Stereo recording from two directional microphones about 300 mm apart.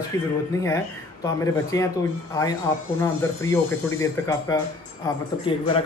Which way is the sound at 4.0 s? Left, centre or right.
Centre.